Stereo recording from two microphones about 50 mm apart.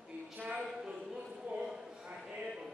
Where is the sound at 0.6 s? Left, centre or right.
Centre.